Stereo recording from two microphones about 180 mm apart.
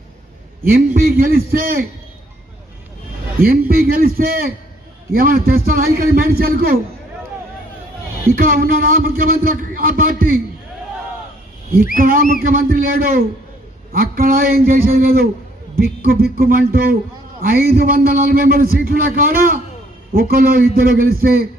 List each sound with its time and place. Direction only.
0.6 s a man's voice: 55° right (ahead or behind)
3.3 s a man's voice: 55° right (ahead or behind)
8.3 s a man's voice: 55° right (ahead or behind)
11.9 s a man's voice: 50° right (ahead or behind)